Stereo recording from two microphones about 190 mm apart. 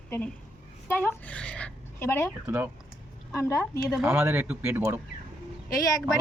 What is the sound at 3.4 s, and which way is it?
Speech, 15° left (ahead or behind).